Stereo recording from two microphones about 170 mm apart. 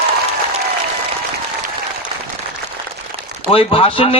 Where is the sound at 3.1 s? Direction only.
35° right (ahead or behind).